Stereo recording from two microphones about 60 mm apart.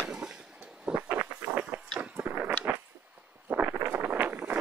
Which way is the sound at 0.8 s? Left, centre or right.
Centre.